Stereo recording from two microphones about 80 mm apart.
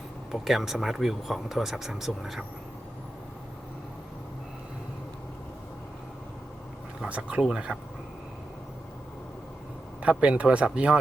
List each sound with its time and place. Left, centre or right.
0.3 s speech: centre
7.1 s speech: centre
10.0 s speech: centre